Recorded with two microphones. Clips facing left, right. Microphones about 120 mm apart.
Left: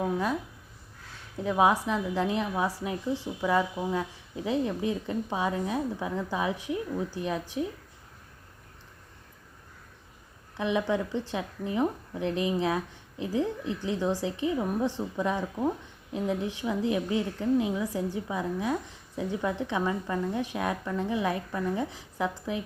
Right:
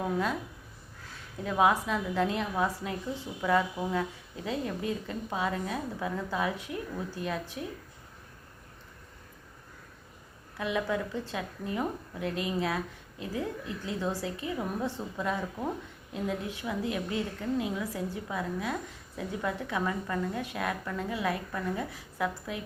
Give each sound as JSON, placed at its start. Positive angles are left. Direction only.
{"t": 0.0, "sound": "a woman's voice", "side_deg": 15}
{"t": 1.5, "sound": "a woman's voice", "side_deg": 15}
{"t": 10.6, "sound": "a woman's voice", "side_deg": 20}